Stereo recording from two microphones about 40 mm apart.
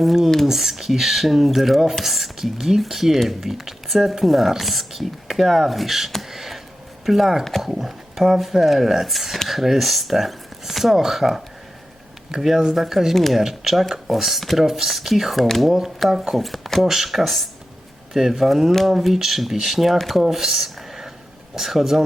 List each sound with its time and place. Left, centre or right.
0.4 s speech: centre
6.3 s a sound: centre
7.0 s speech: centre
13.1 s speech: centre
13.4 s speech: centre
20.2 s a sound: centre
21.5 s speech: centre